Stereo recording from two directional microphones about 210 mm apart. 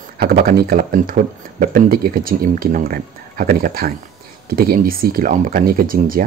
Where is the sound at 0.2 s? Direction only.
45° right (ahead or behind).